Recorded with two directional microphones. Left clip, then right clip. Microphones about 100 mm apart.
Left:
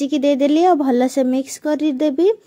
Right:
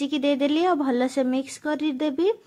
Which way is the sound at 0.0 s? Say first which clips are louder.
Left 7 dB; 35° left (ahead or behind).